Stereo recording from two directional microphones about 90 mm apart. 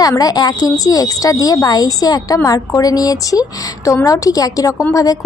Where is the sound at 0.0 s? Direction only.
45° left (ahead or behind).